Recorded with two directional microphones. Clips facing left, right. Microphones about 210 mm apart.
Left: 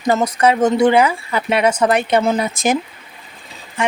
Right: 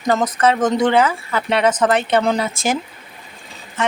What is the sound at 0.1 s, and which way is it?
Speech, 10° left (ahead or behind).